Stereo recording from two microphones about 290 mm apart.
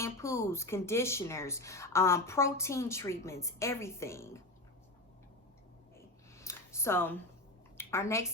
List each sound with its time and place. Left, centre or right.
0.0 s speech: centre
6.4 s a sound: centre
7.8 s speech: centre